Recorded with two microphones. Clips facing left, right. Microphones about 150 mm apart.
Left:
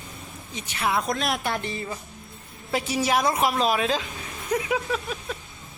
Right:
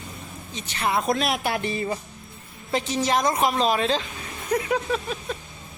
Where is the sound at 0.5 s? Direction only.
10° left (ahead or behind).